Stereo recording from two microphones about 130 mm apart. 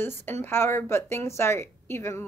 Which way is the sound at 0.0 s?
15° left (ahead or behind).